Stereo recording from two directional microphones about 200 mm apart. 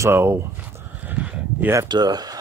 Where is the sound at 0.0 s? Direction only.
10° right (ahead or behind).